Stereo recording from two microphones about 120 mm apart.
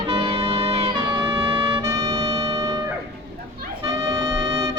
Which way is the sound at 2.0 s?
50° right (ahead or behind).